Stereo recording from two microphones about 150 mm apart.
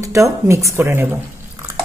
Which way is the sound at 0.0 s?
20° right (ahead or behind).